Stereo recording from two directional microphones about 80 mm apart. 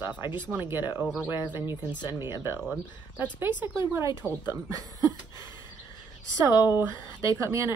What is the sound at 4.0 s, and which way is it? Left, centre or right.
Speech, right.